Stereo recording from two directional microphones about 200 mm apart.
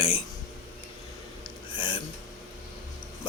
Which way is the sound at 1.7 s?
25° left (ahead or behind).